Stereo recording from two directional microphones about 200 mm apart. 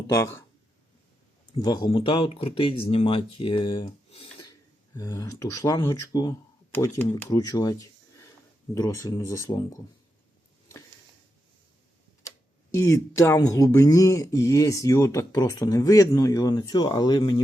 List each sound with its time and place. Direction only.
0.1 s speech: 15° left (ahead or behind)
1.6 s speech: 20° left (ahead or behind)
12.9 s speech: 15° left (ahead or behind)